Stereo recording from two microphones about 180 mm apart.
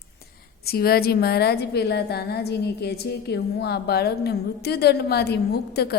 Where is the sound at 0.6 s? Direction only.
60° left (ahead or behind).